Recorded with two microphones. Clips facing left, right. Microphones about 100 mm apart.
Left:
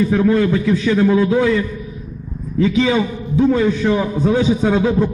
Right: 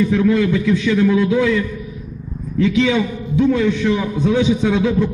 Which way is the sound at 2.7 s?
35° left (ahead or behind).